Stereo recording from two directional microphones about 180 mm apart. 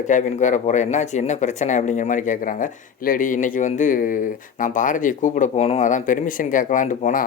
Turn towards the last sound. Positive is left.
turn(degrees=45)  # may be behind; listen again after turning